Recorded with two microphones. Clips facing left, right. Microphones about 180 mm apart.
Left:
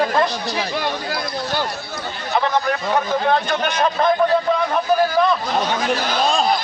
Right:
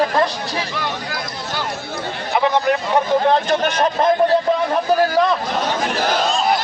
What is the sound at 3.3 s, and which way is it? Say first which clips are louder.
Speech: right 2 dB; 40° right (ahead or behind).